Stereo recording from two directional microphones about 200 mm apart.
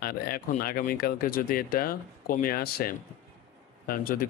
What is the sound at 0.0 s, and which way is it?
Speech, 45° left (ahead or behind).